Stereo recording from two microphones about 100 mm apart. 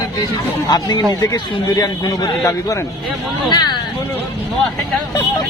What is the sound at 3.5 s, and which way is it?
Speech, 45° left (ahead or behind).